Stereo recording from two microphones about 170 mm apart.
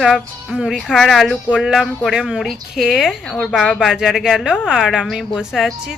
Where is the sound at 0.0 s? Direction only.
Centre (ahead or behind).